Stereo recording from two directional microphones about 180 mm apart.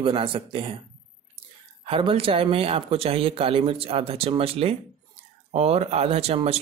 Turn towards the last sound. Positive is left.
turn(degrees=-35)  # may be behind; listen again after turning